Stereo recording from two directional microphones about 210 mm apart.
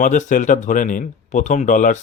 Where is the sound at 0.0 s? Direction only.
35° left (ahead or behind).